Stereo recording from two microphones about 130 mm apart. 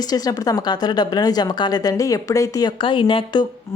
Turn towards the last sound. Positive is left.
turn(degrees=40)  # may be behind; listen again after turning